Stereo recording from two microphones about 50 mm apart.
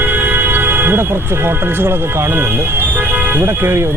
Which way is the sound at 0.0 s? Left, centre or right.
Right.